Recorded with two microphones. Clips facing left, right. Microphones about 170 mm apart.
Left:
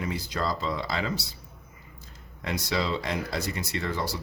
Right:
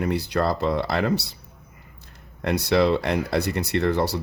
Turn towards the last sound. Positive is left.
turn(degrees=-65)  # may be behind; listen again after turning